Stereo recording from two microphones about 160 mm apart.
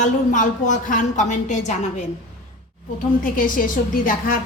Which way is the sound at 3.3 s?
55° left (ahead or behind).